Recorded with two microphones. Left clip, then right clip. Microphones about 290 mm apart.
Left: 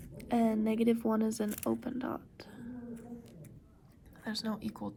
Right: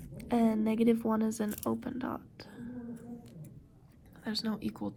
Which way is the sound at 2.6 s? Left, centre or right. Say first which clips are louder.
Right 2 dB; centre.